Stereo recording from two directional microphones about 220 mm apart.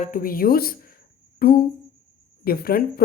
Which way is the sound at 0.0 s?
40° left (ahead or behind).